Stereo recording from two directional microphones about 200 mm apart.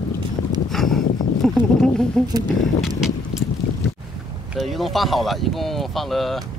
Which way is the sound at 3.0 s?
Centre (ahead or behind).